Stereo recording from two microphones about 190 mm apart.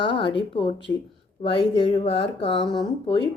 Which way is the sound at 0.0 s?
25° left (ahead or behind).